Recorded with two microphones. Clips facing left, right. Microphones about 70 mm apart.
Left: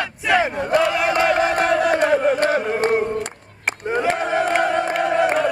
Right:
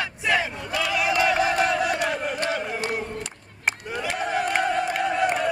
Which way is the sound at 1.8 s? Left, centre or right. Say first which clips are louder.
Left 9 dB; left.